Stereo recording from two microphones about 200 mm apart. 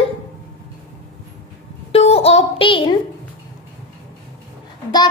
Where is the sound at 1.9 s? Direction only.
30° left (ahead or behind).